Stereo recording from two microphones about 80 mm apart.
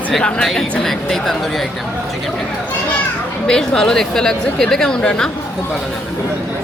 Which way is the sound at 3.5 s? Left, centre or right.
Centre.